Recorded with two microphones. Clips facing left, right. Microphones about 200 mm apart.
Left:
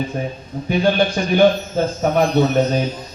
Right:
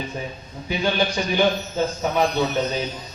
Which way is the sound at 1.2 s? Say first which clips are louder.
Left 4 dB; 50° left (ahead or behind).